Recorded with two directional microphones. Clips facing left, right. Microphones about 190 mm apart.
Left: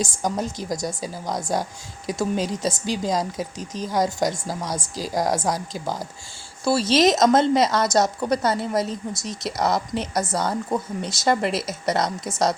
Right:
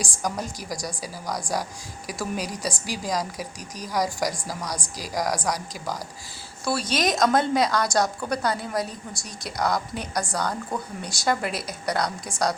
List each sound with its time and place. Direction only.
0.0 s speech: 25° left (ahead or behind)